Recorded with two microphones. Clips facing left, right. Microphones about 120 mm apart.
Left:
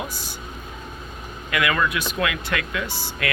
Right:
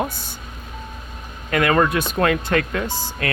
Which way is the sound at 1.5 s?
40° right (ahead or behind).